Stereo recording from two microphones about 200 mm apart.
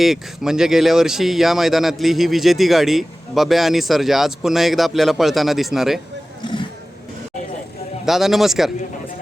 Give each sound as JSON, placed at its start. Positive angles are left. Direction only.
{"t": 0.0, "sound": "speech", "side_deg": 0}
{"t": 6.4, "sound": "vehicle", "side_deg": 25}
{"t": 8.0, "sound": "speech", "side_deg": 0}